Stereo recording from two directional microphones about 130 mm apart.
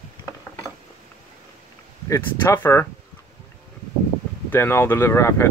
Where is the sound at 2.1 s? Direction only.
20° left (ahead or behind).